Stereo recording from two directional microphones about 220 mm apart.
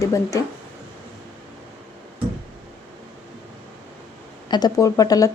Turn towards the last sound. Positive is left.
turn(degrees=15)  # may be behind; listen again after turning